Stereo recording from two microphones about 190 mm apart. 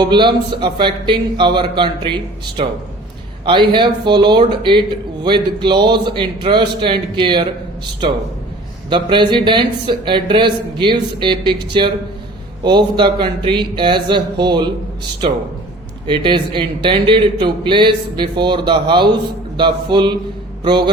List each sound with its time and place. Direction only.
0.0 s speech: 25° right (ahead or behind)
8.9 s speech: 25° right (ahead or behind)
16.0 s speech: 25° right (ahead or behind)